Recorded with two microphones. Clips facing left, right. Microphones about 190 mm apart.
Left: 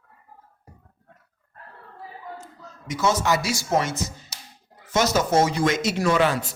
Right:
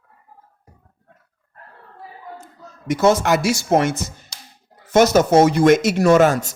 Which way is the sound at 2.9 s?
55° right (ahead or behind).